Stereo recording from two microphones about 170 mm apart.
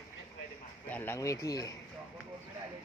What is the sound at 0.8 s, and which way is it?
Speech, 10° left (ahead or behind).